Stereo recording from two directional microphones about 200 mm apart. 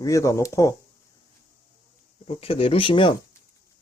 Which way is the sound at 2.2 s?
30° left (ahead or behind).